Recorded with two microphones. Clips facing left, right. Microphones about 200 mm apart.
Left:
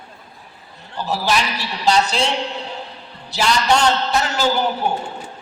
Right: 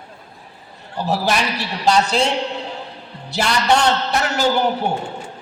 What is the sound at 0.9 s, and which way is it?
A man's voice, 60° right (ahead or behind).